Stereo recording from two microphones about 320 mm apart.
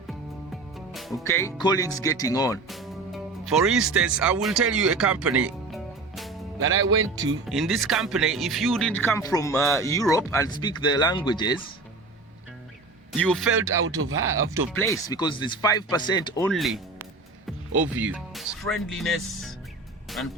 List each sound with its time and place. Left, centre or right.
0.1 s music: centre
2.6 s speech: centre
5.4 s music: centre
6.6 s speech: right
7.4 s speech: centre
13.1 s a man's voice: centre
14.0 s speech: right
14.7 s speech: centre
16.5 s a man's voice: centre
20.1 s music: centre